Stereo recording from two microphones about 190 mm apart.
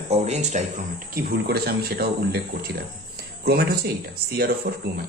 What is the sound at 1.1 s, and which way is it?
Speech, 55° right (ahead or behind).